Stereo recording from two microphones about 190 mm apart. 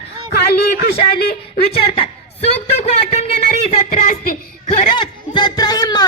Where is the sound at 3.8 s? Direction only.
45° left (ahead or behind).